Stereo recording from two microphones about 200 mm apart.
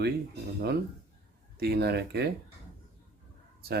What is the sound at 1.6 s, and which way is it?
Speech, 55° right (ahead or behind).